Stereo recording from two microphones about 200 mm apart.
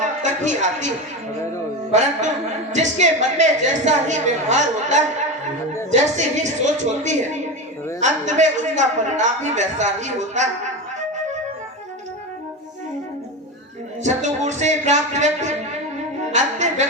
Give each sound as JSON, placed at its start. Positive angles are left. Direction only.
{"t": 0.0, "sound": "a sound", "side_deg": -35}
{"t": 2.7, "sound": "a man's voice", "side_deg": -35}
{"t": 14.0, "sound": "a man's voice", "side_deg": -35}